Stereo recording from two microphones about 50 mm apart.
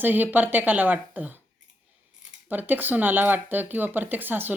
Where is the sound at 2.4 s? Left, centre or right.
Right.